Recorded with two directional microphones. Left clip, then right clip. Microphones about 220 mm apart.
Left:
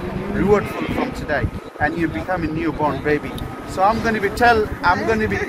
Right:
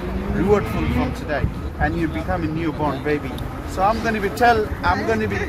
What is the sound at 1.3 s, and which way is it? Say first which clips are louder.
Speech: left 2 dB; 15° right (ahead or behind).